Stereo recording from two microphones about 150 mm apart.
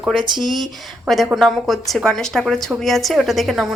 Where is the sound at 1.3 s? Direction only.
Centre (ahead or behind).